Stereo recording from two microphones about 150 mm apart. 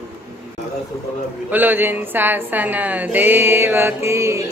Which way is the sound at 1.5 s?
10° right (ahead or behind).